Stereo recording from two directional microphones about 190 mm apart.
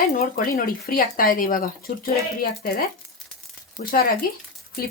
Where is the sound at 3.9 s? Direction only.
50° left (ahead or behind).